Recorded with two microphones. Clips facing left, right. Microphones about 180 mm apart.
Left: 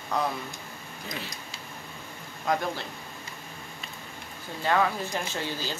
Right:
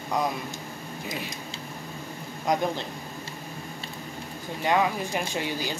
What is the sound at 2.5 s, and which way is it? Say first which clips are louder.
Speech: right 3 dB; 20° right (ahead or behind).